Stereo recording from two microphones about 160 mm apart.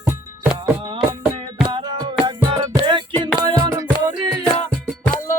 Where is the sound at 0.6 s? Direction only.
30° right (ahead or behind).